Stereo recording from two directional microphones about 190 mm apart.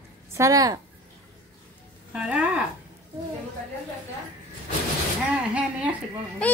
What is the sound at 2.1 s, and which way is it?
Speech, 5° right (ahead or behind).